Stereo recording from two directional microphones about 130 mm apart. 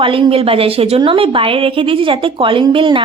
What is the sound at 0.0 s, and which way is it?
A woman's voice, 40° right (ahead or behind).